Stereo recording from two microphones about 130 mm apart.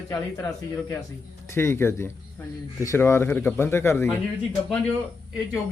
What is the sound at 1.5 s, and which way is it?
Speech, 20° left (ahead or behind).